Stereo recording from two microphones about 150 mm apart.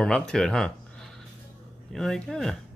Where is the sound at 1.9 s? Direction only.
Centre (ahead or behind).